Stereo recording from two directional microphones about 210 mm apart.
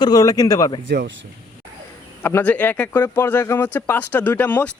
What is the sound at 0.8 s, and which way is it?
Speech, 55° right (ahead or behind).